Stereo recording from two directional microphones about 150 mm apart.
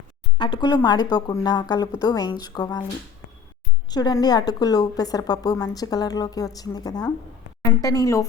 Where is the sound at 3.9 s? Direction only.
25° left (ahead or behind).